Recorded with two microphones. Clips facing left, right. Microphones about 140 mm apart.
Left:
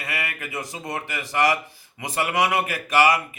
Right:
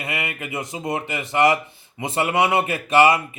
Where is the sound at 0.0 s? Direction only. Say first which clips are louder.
Right 3 dB; 20° right (ahead or behind).